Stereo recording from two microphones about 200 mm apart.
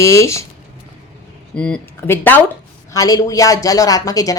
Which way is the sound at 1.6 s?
10° left (ahead or behind).